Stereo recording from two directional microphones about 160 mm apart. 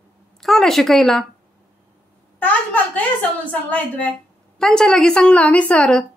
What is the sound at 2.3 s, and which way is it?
A woman's voice, 10° left (ahead or behind).